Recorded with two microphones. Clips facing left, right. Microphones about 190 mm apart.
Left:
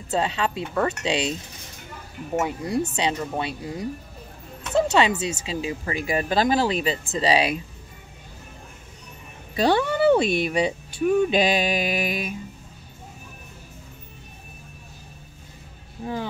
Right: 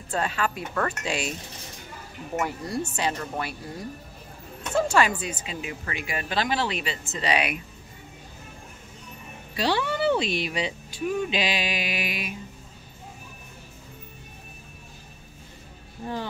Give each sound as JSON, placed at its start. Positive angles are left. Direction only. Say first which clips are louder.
{"t": 0.1, "sound": "speech", "louder": "left 3 dB", "side_deg": 25}
{"t": 2.4, "sound": "speech", "louder": "left 4 dB", "side_deg": 15}
{"t": 9.6, "sound": "speech", "louder": "left 5 dB", "side_deg": 50}
{"t": 16.0, "sound": "speech", "louder": "left 3 dB", "side_deg": 10}